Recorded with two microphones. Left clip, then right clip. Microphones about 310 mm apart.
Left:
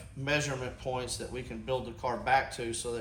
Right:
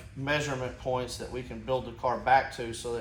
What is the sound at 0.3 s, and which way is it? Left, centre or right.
Speech, centre.